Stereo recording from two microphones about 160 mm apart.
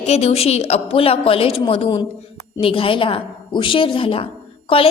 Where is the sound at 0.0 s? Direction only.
40° left (ahead or behind).